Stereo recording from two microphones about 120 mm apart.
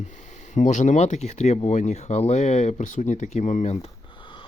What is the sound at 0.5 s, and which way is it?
Speech, 90° left.